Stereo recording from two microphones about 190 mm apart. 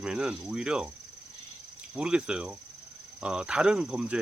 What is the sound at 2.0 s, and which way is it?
Speech, 5° right (ahead or behind).